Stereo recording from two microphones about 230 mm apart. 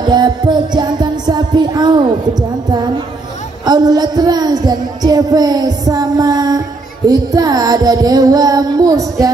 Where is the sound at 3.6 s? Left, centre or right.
Centre.